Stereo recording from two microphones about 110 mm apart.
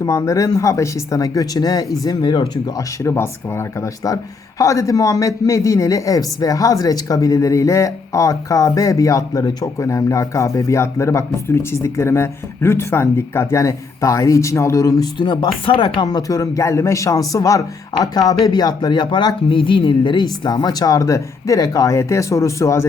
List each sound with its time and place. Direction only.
0.0 s a man's voice: 35° left (ahead or behind)
16.2 s a man's voice: 30° left (ahead or behind)